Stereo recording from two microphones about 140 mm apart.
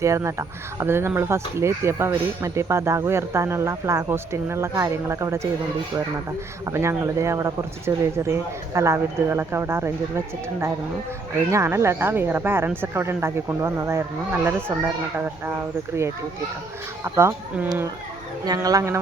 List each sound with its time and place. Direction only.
0.0 s speech: 20° right (ahead or behind)
6.7 s speech: 20° right (ahead or behind)
17.0 s speech: 20° right (ahead or behind)